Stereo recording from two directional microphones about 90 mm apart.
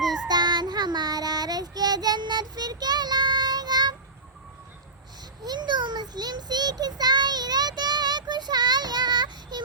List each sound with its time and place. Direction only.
0.0 s child singing: centre (ahead or behind)
0.3 s child singing: 50° right (ahead or behind)
5.5 s child singing: 55° right (ahead or behind)